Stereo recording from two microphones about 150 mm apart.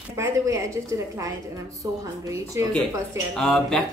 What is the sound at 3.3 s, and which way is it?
Speech, 5° left (ahead or behind).